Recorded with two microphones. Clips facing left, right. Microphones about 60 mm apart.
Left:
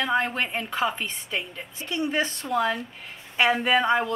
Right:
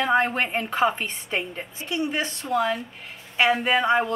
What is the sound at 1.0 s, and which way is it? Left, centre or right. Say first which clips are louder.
A woman's voice: right 2 dB; right.